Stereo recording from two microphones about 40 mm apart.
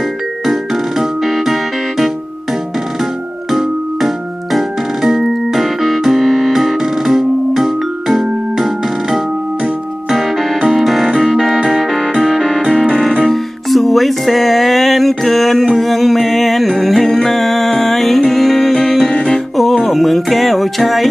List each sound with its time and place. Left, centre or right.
1.2 s music: centre
5.0 s music: centre
10.1 s music: centre
11.2 s keyboard: centre
12.1 s music: centre
13.2 s music: centre